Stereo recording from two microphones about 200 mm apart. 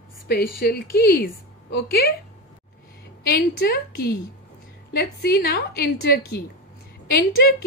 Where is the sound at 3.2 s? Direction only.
50° left (ahead or behind).